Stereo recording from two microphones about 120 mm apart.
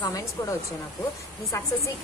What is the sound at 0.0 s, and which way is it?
A woman's voice, 30° left (ahead or behind).